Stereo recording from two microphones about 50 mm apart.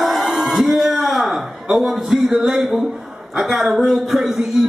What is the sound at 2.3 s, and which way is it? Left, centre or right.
A man's voice, centre.